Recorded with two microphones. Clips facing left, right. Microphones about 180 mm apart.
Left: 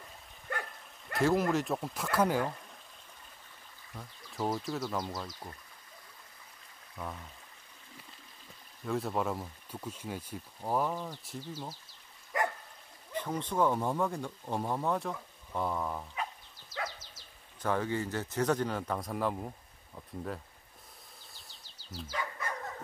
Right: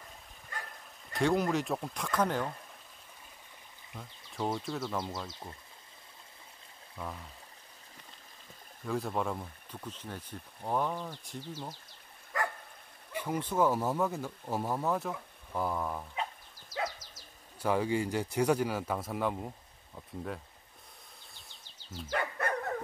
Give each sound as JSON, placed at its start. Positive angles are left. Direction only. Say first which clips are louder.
{"t": 0.5, "sound": "dog", "louder": "left 6 dB", "side_deg": 60}
{"t": 1.1, "sound": "speech", "louder": "left 1 dB", "side_deg": 0}
{"t": 3.9, "sound": "speech", "louder": "even", "side_deg": 0}
{"t": 8.8, "sound": "speech", "louder": "left 1 dB", "side_deg": 0}
{"t": 12.3, "sound": "dog", "louder": "left 2 dB", "side_deg": 20}
{"t": 13.1, "sound": "speech", "louder": "right 1 dB", "side_deg": -10}
{"t": 17.6, "sound": "speech", "louder": "right 2 dB", "side_deg": -10}
{"t": 21.7, "sound": "bird", "louder": "even", "side_deg": 35}
{"t": 22.1, "sound": "dog", "louder": "right 6 dB", "side_deg": -60}